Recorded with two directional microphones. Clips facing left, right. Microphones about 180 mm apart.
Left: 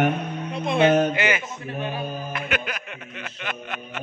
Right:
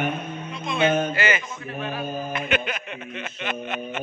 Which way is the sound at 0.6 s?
60° left (ahead or behind).